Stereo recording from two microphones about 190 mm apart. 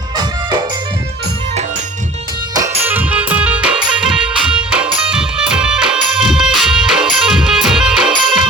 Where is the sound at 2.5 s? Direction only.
15° right (ahead or behind).